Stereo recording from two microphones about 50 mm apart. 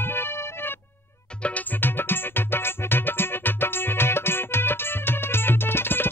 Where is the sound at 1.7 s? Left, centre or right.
Left.